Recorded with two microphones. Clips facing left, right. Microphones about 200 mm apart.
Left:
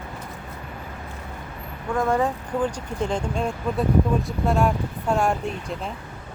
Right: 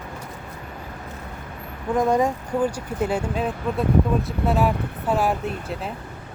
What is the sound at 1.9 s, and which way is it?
Speech, 15° right (ahead or behind).